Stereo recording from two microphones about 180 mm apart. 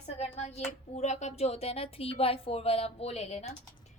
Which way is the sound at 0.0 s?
35° left (ahead or behind).